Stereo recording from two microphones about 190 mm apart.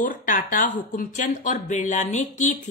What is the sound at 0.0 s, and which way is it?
A woman's voice, 45° left (ahead or behind).